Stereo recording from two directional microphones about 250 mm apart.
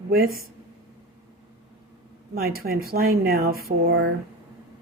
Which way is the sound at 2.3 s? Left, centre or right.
Right.